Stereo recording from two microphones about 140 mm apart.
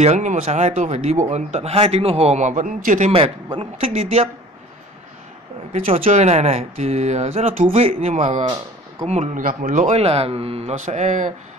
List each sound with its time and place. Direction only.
0.0 s speech: 55° right (ahead or behind)
3.5 s speech: 45° right (ahead or behind)
5.7 s speech: 50° right (ahead or behind)